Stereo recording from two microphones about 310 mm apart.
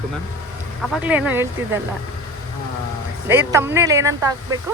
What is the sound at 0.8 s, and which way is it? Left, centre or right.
Speech, centre.